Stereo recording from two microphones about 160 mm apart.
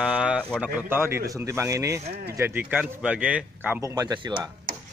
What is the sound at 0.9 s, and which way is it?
Speech, 15° right (ahead or behind).